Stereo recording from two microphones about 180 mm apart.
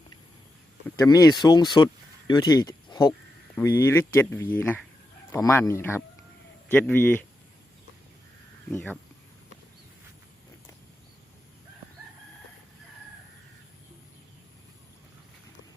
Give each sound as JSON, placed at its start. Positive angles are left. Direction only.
{"t": 0.9, "sound": "speech", "side_deg": 20}
{"t": 8.7, "sound": "speech", "side_deg": 10}